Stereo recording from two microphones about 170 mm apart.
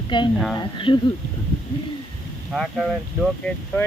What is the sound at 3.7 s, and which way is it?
Speech, 10° left (ahead or behind).